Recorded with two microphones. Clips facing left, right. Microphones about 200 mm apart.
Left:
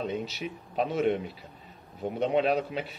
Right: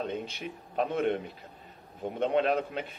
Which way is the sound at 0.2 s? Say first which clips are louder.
Left 3 dB; 50° right (ahead or behind).